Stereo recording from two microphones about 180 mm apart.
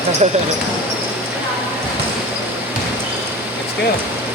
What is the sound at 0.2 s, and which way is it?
Speech, 40° right (ahead or behind).